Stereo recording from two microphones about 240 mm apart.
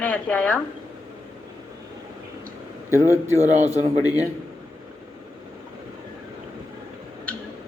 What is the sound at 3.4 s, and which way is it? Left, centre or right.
Speech, right.